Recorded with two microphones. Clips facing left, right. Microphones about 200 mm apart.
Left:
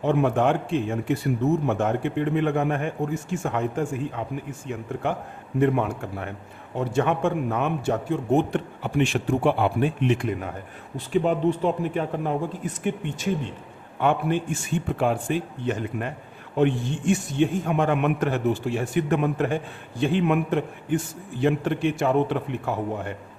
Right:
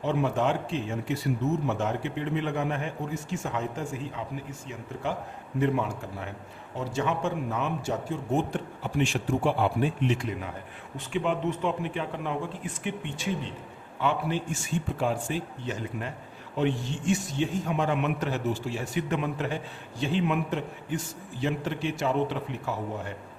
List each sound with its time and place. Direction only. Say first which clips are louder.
0.0 s a man's voice: left 5 dB; 55° left (ahead or behind)
10.9 s speech: left 6 dB; 40° left (ahead or behind)
14.0 s a man's voice: left 5 dB; 55° left (ahead or behind)